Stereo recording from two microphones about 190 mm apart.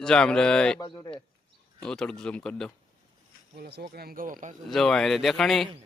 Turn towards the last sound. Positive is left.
turn(degrees=0)  # may be behind; listen again after turning